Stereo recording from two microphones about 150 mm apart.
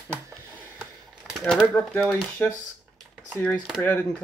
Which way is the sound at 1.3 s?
Centre (ahead or behind).